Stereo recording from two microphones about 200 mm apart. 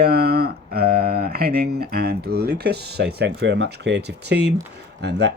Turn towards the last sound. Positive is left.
turn(degrees=-55)  # may be behind; listen again after turning